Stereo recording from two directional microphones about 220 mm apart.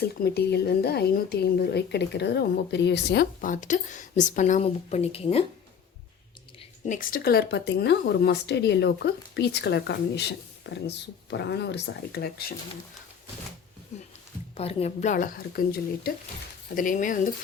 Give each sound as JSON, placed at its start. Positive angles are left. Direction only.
{"t": 0.0, "sound": "speech", "side_deg": 45}
{"t": 6.8, "sound": "speech", "side_deg": 35}
{"t": 14.5, "sound": "speech", "side_deg": 25}